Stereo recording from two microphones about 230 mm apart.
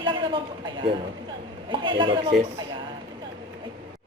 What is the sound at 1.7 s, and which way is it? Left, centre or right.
Speech, right.